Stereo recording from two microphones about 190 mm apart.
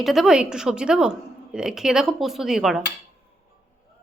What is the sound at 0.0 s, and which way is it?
Speech, centre (ahead or behind).